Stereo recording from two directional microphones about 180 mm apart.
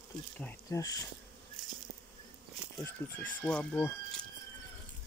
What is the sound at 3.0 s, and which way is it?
Speech, 15° left (ahead or behind).